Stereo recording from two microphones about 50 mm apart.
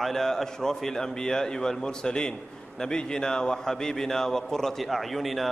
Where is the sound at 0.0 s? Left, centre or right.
Centre.